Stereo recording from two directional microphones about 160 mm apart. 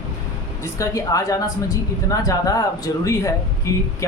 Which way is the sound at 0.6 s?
20° left (ahead or behind).